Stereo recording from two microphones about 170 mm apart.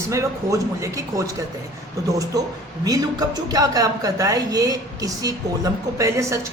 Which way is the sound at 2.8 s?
20° right (ahead or behind).